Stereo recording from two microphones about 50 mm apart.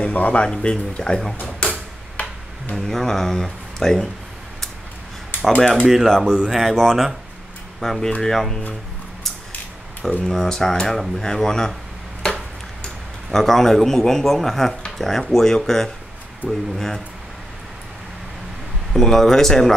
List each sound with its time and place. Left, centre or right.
0.0 s speech: left
1.4 s tick-tock: left
2.7 s speech: centre
5.9 s speech: centre
6.3 s speech: centre
6.6 s speech: centre
10.2 s speech: centre
12.2 s ping: centre
13.3 s speech: centre
18.9 s speech: centre